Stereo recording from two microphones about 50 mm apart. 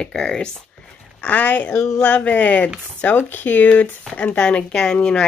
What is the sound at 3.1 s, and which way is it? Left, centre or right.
Speech, left.